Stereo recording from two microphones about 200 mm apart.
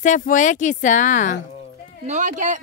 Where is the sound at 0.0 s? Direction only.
40° left (ahead or behind).